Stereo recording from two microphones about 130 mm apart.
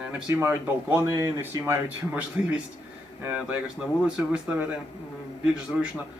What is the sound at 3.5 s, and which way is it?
Speech, 10° right (ahead or behind).